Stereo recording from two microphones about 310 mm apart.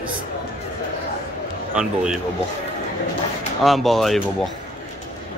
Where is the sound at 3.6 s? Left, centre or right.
Centre.